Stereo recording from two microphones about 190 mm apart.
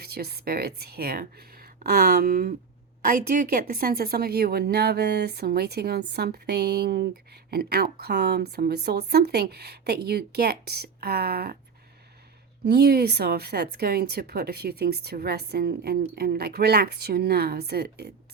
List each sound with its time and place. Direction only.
0.0 s speech: 55° right (ahead or behind)
12.6 s speech: 60° right (ahead or behind)